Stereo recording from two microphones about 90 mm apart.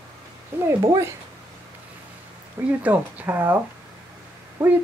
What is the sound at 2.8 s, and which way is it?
Speech, 20° right (ahead or behind).